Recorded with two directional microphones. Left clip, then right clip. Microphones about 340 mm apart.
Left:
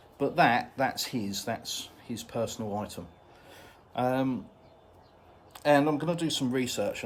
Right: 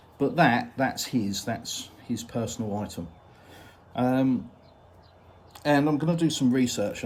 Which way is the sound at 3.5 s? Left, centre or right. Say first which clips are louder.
Right 1 dB; centre.